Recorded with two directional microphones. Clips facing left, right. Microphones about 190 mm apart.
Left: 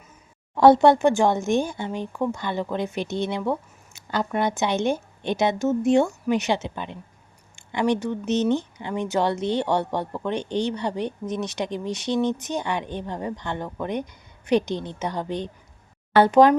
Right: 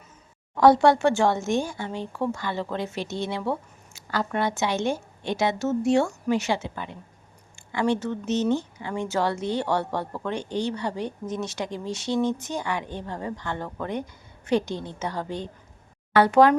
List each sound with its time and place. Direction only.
0.5 s speech: 25° left (ahead or behind)